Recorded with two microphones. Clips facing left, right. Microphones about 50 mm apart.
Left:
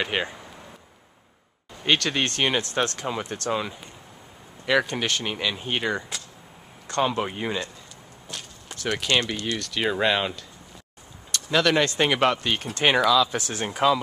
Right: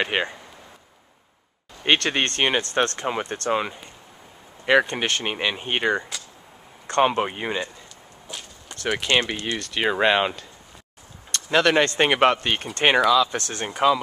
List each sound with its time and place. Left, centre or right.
0.0 s speech: centre
1.9 s speech: right
7.2 s speech: centre
8.3 s a sound: centre
8.8 s speech: centre
11.5 s speech: centre
12.8 s speech: centre